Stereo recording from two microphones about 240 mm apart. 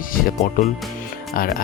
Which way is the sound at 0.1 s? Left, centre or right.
Left.